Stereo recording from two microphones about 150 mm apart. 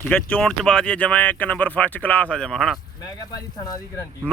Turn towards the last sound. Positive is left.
turn(degrees=25)  # may be behind; listen again after turning